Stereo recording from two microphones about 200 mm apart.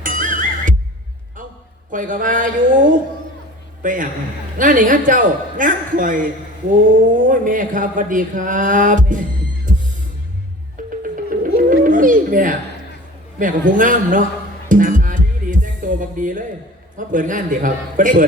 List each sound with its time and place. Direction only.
0.0 s music: 40° right (ahead or behind)
1.9 s speech: 40° right (ahead or behind)
9.7 s music: 40° right (ahead or behind)
11.0 s music: 45° right (ahead or behind)
13.4 s speech: 40° right (ahead or behind)
14.7 s music: 40° right (ahead or behind)
17.1 s speech: 40° right (ahead or behind)